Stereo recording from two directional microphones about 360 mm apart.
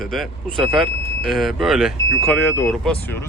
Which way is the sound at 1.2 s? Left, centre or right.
Centre.